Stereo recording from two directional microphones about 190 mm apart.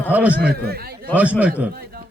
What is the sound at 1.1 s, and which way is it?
Speech, 5° right (ahead or behind).